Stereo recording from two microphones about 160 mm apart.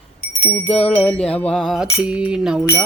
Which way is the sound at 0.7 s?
10° left (ahead or behind).